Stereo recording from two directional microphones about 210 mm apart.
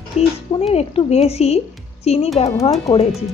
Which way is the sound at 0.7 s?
30° left (ahead or behind).